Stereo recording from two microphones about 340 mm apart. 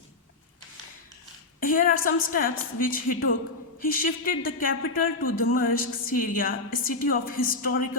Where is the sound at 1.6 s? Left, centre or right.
Left.